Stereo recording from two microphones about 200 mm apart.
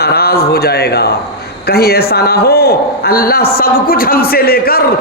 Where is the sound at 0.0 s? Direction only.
50° left (ahead or behind).